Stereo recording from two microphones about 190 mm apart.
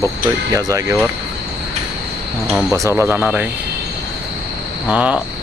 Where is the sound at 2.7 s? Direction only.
15° right (ahead or behind).